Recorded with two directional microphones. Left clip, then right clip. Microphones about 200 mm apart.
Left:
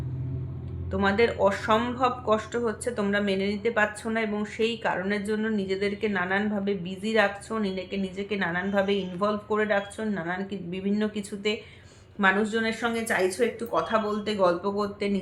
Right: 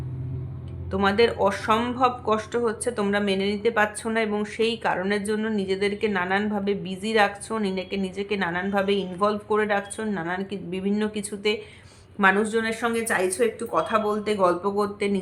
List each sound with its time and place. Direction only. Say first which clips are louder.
0.9 s speech: right 3 dB; 20° right (ahead or behind)